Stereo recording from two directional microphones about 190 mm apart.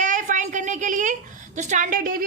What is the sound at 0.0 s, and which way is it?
A woman's voice, 40° right (ahead or behind).